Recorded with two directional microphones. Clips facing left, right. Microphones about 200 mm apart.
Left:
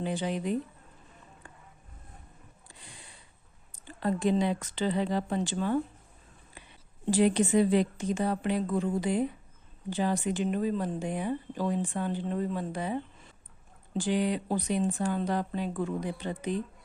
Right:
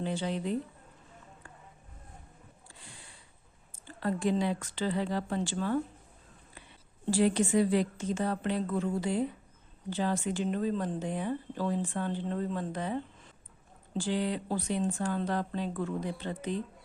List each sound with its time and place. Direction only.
0.0 s a woman's voice: 15° left (ahead or behind)
3.8 s speech: 20° left (ahead or behind)
7.0 s a woman's voice: 20° left (ahead or behind)